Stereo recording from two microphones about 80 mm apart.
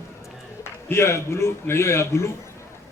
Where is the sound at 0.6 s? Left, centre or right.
Left.